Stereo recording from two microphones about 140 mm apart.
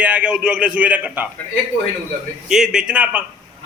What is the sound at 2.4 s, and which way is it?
Speech, 5° right (ahead or behind).